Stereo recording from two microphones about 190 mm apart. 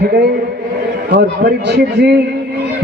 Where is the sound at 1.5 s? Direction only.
60° right (ahead or behind).